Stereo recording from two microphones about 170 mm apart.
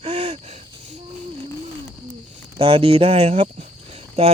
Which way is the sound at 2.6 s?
30° right (ahead or behind).